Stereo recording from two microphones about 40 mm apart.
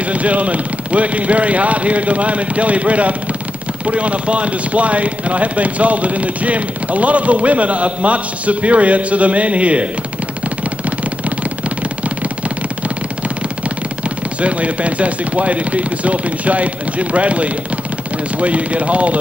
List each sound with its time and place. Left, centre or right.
0.0 s speech: right
14.4 s speech: right